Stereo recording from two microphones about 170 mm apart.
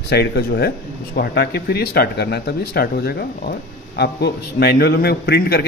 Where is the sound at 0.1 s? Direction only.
75° left (ahead or behind).